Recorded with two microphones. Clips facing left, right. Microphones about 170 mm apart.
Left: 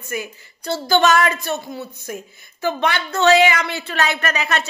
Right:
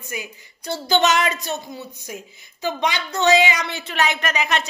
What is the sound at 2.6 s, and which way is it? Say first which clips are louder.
A woman's voice: left 3 dB; 15° right (ahead or behind).